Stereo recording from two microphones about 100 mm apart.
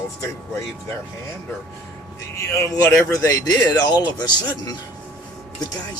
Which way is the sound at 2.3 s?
30° left (ahead or behind).